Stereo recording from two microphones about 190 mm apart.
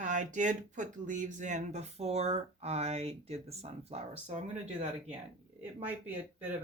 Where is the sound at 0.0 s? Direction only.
40° right (ahead or behind).